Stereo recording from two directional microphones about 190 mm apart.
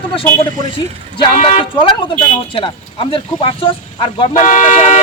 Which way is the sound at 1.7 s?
25° left (ahead or behind).